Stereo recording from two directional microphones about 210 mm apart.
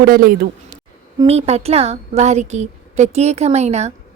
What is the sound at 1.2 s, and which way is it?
A woman's voice, 30° right (ahead or behind).